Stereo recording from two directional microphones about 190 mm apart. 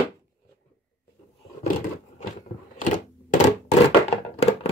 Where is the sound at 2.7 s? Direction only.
40° left (ahead or behind).